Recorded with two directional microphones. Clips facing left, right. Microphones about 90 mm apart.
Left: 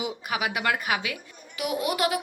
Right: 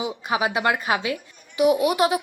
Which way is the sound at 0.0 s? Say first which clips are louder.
Right 5 dB; 30° right (ahead or behind).